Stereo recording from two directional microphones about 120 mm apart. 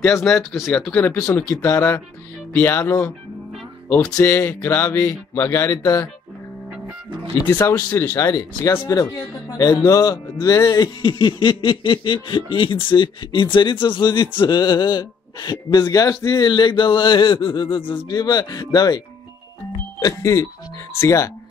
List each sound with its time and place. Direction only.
0.2 s speech: centre (ahead or behind)
0.9 s speech: 20° left (ahead or behind)
7.4 s speech: 25° left (ahead or behind)
8.3 s a man's voice: 30° left (ahead or behind)
20.0 s speech: 30° left (ahead or behind)